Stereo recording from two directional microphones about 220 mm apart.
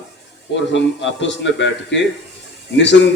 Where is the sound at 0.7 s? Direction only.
55° left (ahead or behind).